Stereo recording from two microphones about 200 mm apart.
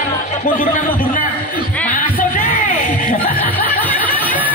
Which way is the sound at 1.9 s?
40° left (ahead or behind).